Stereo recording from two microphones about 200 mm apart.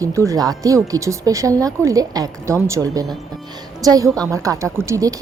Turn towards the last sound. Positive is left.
turn(degrees=-15)  # may be behind; listen again after turning